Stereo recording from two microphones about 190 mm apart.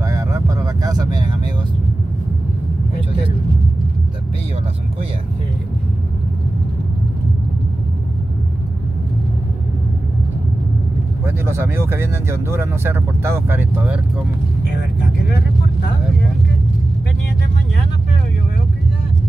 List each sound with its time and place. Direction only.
0.0 s vehicle: 15° right (ahead or behind)
11.2 s speech: 15° right (ahead or behind)